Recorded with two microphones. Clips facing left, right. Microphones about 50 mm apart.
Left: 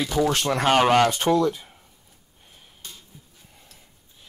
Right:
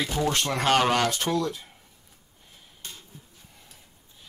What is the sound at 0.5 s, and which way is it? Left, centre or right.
Speech, centre.